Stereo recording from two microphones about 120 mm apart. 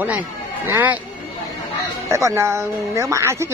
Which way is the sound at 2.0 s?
25° right (ahead or behind).